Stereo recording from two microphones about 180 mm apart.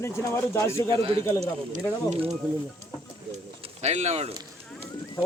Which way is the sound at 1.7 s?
35° right (ahead or behind).